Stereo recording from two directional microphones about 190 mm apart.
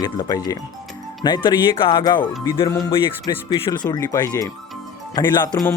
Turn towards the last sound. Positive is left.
turn(degrees=20)  # may be behind; listen again after turning